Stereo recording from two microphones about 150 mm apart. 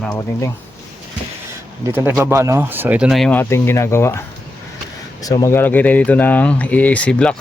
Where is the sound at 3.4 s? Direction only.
15° left (ahead or behind).